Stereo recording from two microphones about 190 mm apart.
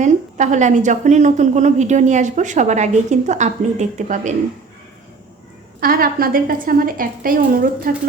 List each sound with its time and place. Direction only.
0.0 s a woman's voice: 40° right (ahead or behind)
5.8 s speech: 50° right (ahead or behind)